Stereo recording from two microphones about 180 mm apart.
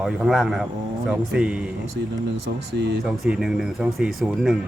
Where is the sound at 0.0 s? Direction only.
5° right (ahead or behind).